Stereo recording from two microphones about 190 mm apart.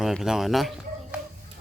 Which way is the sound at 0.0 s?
Centre (ahead or behind).